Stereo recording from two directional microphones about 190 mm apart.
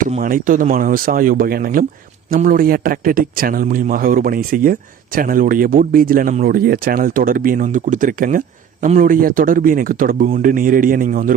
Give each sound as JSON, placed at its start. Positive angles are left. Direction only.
{"t": 0.0, "sound": "a man's voice", "side_deg": -45}